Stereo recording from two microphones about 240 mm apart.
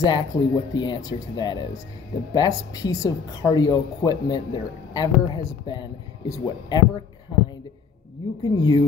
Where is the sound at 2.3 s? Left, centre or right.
Centre.